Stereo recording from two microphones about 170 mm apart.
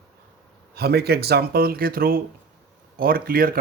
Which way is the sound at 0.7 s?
70° right (ahead or behind).